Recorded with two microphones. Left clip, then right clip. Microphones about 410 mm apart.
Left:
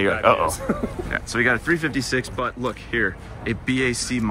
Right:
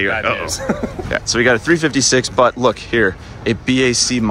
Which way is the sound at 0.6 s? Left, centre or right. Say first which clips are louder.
Right 5 dB; right.